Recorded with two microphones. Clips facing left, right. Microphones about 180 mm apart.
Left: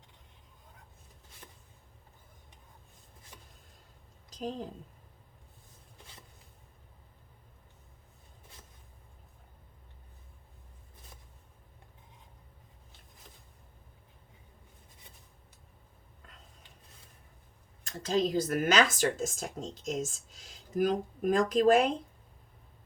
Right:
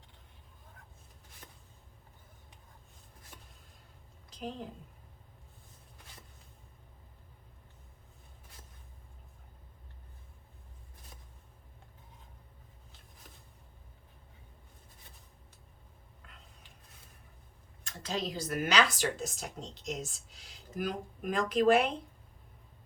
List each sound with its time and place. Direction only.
4.4 s a woman's voice: 40° left (ahead or behind)
18.0 s speech: 50° left (ahead or behind)